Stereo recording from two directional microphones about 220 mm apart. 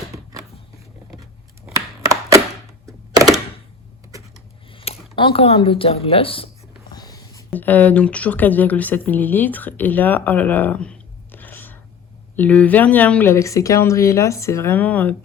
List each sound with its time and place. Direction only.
1.7 s chopping: 15° right (ahead or behind)
4.7 s a sound: 25° left (ahead or behind)
5.1 s speech: 25° left (ahead or behind); by 15.1 s 5° left (ahead or behind)